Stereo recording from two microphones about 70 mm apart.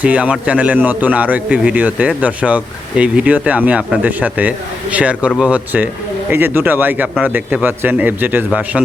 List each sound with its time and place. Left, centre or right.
0.0 s a man's voice: centre
6.3 s a man's voice: right